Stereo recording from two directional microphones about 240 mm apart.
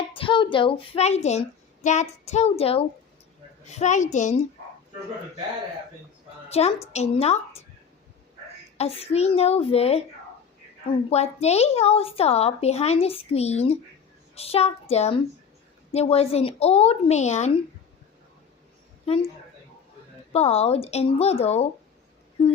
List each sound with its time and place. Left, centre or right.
0.1 s speech: left
6.5 s speech: left
8.8 s speech: left
11.1 s speech: left
20.3 s speech: left